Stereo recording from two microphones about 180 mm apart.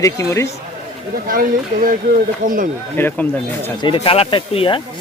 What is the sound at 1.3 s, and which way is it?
Speech, 55° right (ahead or behind).